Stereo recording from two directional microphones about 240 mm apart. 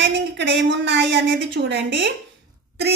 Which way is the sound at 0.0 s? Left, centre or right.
Right.